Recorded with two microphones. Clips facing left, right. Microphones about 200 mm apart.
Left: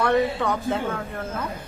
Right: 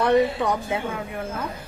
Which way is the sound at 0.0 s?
15° right (ahead or behind).